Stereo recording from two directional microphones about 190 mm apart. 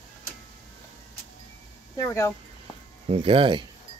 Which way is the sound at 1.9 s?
15° left (ahead or behind).